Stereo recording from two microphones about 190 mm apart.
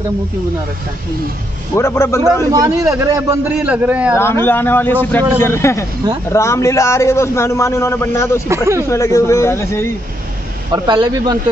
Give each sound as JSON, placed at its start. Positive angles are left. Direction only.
{"t": 1.8, "sound": "a man's voice", "side_deg": 15}
{"t": 2.5, "sound": "a man's voice", "side_deg": -15}
{"t": 4.2, "sound": "a man's voice", "side_deg": 10}
{"t": 10.7, "sound": "speech", "side_deg": -20}